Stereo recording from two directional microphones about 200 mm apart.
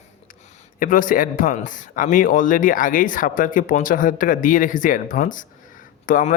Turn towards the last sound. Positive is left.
turn(degrees=45)  # may be behind; listen again after turning